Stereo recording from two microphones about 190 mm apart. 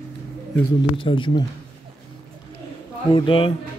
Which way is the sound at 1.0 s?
25° left (ahead or behind).